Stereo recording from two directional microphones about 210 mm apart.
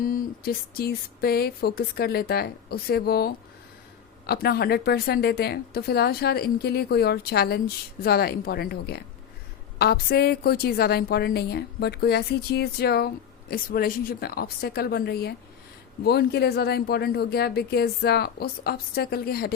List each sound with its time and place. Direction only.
0.0 s a woman's voice: 45° left (ahead or behind)